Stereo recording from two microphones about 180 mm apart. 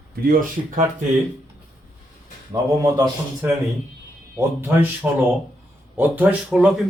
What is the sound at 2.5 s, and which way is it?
A man's voice, 20° right (ahead or behind).